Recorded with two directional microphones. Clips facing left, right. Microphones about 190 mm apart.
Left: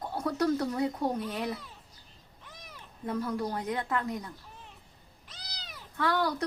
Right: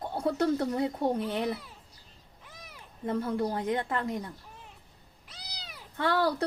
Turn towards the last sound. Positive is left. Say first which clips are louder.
# right 2 dB
turn(degrees=-30)  # may be behind; listen again after turning